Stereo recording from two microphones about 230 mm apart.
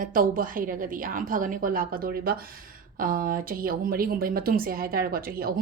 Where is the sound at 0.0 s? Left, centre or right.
Right.